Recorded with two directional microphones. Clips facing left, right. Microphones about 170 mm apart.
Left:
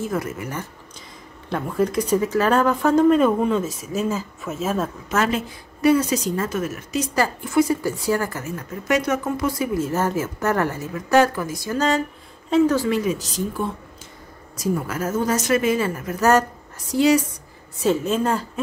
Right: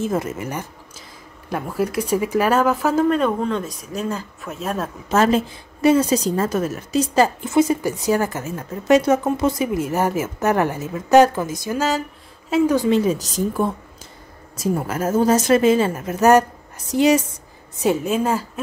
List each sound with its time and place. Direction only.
0.0 s a woman's voice: 25° right (ahead or behind)
1.5 s speech: 5° right (ahead or behind)
5.1 s a woman's voice: 30° right (ahead or behind)
13.0 s speech: 35° right (ahead or behind)
14.6 s a woman's voice: 25° right (ahead or behind); by 18.4 s 10° right (ahead or behind)